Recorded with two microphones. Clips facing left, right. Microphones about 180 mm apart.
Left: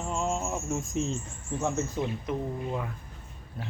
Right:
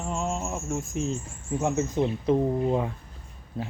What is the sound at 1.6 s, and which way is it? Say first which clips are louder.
Speech: right 4 dB; 15° right (ahead or behind).